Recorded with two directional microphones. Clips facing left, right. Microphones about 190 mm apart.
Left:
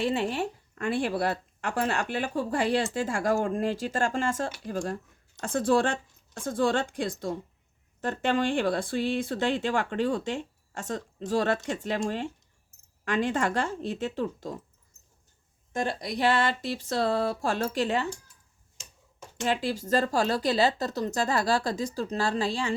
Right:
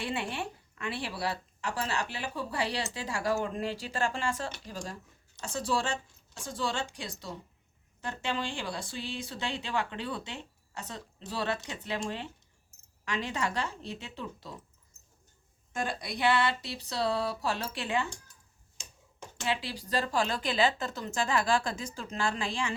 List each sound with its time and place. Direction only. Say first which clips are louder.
0.0 s speech: left 7 dB; 40° left (ahead or behind)
16.0 s speech: left 2 dB; 45° left (ahead or behind)
19.5 s speech: left 7 dB; 45° left (ahead or behind)